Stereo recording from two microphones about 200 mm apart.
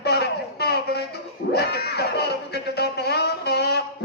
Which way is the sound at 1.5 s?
55° left (ahead or behind).